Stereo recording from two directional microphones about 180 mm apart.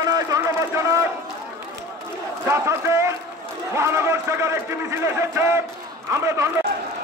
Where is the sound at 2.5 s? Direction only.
15° right (ahead or behind).